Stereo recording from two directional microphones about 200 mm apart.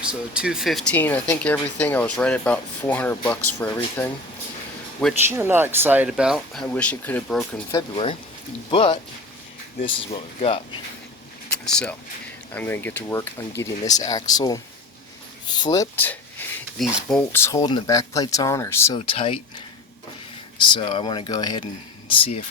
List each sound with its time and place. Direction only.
0.0 s speech: 5° right (ahead or behind)
5.3 s speech: 10° right (ahead or behind); by 7.4 s 5° left (ahead or behind)
7.7 s speech: 20° left (ahead or behind)
10.1 s speech: 30° left (ahead or behind)
11.5 s speech: 5° left (ahead or behind)
17.6 s speech: 25° left (ahead or behind)
18.9 s speech: 30° left (ahead or behind)